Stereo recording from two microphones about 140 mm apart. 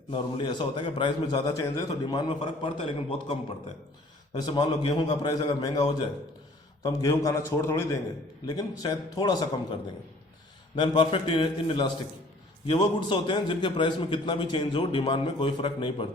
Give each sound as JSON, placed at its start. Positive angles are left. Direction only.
{"t": 0.1, "sound": "a man's voice", "side_deg": 35}
{"t": 4.4, "sound": "a man's voice", "side_deg": 30}
{"t": 8.4, "sound": "a man's voice", "side_deg": 30}
{"t": 10.8, "sound": "a man's voice", "side_deg": 35}